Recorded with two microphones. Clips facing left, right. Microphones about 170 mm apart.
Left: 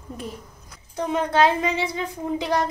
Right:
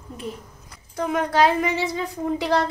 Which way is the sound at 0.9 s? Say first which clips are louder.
Even; 25° left (ahead or behind).